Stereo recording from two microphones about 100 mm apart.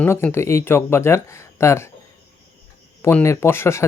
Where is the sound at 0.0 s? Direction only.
20° left (ahead or behind).